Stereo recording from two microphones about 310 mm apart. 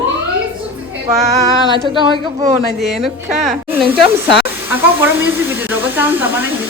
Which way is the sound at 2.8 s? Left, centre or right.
Centre.